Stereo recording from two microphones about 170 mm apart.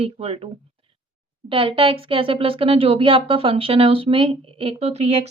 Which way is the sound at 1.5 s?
30° right (ahead or behind).